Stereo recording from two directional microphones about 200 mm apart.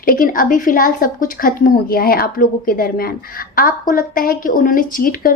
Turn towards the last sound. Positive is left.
turn(degrees=45)  # may be behind; listen again after turning